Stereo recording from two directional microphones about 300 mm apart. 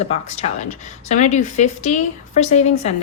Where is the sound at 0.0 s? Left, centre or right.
Left.